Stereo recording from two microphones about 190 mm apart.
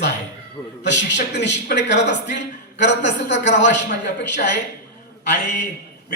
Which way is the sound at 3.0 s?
70° left (ahead or behind).